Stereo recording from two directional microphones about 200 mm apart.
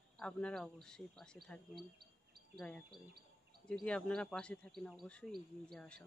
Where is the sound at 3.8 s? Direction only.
5° left (ahead or behind).